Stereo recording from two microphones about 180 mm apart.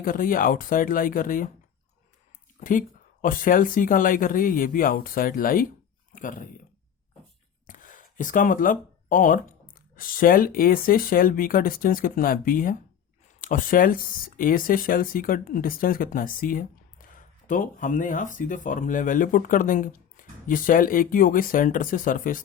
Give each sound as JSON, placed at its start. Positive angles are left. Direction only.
{"t": 0.0, "sound": "speech", "side_deg": 50}
{"t": 2.6, "sound": "speech", "side_deg": 45}
{"t": 7.7, "sound": "speech", "side_deg": 45}